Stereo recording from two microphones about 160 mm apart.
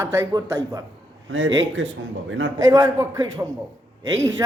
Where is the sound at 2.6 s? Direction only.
20° right (ahead or behind).